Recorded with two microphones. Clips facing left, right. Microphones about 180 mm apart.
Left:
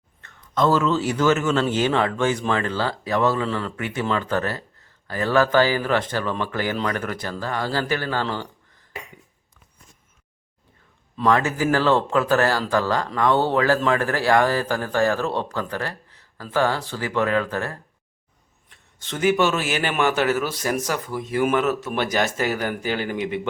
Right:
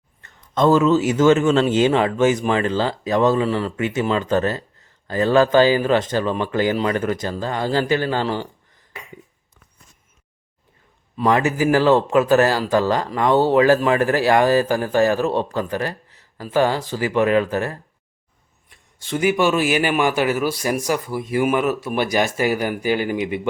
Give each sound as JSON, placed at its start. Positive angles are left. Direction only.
{"t": 0.5, "sound": "a man's voice", "side_deg": -25}
{"t": 11.2, "sound": "a man's voice", "side_deg": -15}